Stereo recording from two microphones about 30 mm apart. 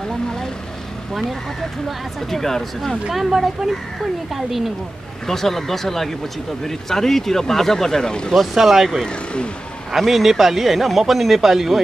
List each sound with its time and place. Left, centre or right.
2.3 s speech: centre
3.1 s speech: centre
5.2 s speech: centre
8.5 s speech: centre